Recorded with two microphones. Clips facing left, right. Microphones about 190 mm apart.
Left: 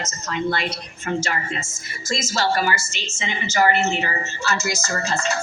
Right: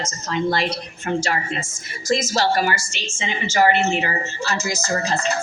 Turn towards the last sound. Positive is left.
turn(degrees=-35)  # may be behind; listen again after turning